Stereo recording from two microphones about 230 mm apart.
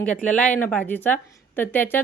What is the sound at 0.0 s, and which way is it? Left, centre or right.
A woman's voice, centre.